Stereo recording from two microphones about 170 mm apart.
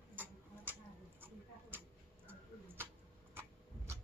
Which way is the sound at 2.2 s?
10° right (ahead or behind).